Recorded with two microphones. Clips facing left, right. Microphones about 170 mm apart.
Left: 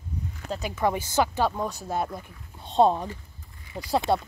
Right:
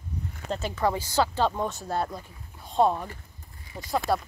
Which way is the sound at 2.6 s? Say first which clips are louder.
Left 3 dB; 25° left (ahead or behind).